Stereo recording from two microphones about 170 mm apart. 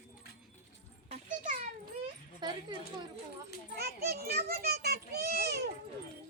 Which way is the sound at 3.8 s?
70° right (ahead or behind).